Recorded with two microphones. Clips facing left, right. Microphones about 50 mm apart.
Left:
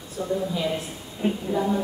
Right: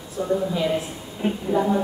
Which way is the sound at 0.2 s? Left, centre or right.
Centre.